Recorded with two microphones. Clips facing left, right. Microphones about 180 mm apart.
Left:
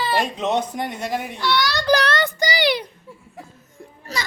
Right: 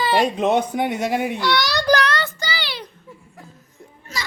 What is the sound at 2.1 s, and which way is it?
Child singing, 15° left (ahead or behind).